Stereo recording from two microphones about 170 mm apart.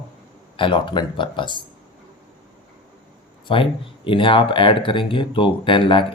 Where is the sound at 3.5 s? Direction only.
30° left (ahead or behind).